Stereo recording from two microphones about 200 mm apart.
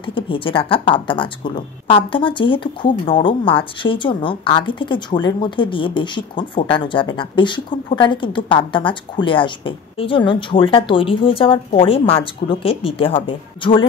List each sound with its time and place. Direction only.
0.0 s a woman's voice: 25° left (ahead or behind)